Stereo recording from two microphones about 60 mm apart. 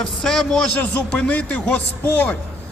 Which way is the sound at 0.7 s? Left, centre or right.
Left.